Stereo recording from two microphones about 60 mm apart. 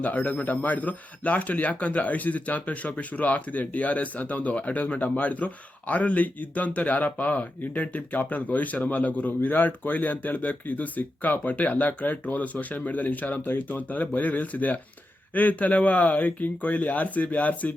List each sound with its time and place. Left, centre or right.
0.0 s a man's voice: left